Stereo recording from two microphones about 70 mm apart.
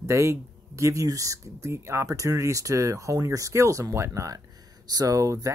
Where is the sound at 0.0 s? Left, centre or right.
Right.